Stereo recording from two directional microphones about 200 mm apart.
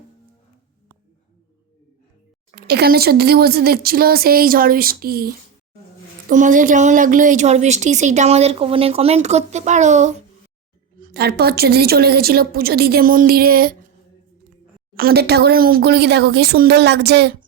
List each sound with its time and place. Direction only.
2.6 s a woman's voice: 50° right (ahead or behind); by 10.2 s 35° right (ahead or behind)
11.0 s a woman's voice: 50° right (ahead or behind)
14.9 s a woman's voice: 50° right (ahead or behind)